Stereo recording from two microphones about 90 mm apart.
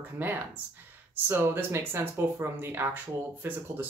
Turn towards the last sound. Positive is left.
turn(degrees=-20)  # may be behind; listen again after turning